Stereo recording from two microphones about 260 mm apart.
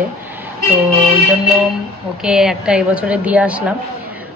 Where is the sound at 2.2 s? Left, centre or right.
Centre.